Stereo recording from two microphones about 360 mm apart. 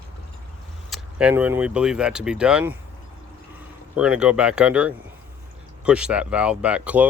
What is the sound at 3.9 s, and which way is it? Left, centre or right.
Speech, centre.